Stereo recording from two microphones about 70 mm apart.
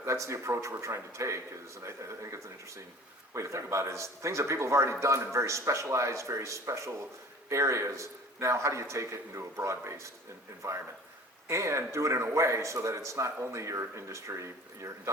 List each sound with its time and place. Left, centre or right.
0.0 s a man's voice: right